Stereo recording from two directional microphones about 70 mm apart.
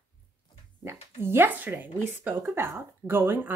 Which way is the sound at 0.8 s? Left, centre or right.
Right.